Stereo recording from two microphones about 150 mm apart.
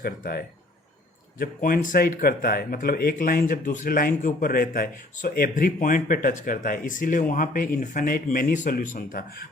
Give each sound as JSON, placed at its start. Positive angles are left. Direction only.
{"t": 0.0, "sound": "speech", "side_deg": 90}
{"t": 1.4, "sound": "speech", "side_deg": 70}